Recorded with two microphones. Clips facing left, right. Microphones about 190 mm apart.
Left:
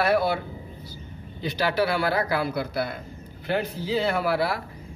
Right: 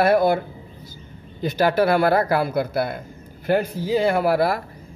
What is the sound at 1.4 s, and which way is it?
A man's voice, 50° right (ahead or behind).